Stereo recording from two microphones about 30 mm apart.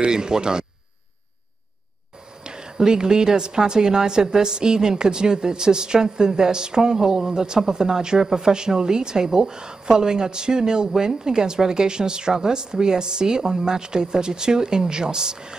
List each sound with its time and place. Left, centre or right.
0.0 s a woman's voice: right
2.4 s a woman's voice: right